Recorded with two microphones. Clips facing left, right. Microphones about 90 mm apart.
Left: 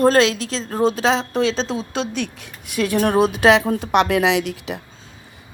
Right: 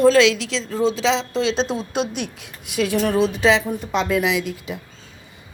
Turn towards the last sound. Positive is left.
turn(degrees=70)  # may be behind; listen again after turning